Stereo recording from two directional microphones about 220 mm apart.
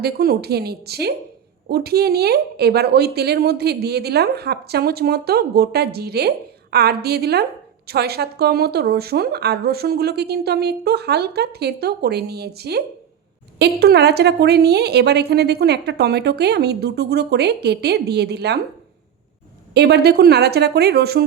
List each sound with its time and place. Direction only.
0.0 s a woman's voice: 45° right (ahead or behind)
19.7 s a woman's voice: 50° right (ahead or behind)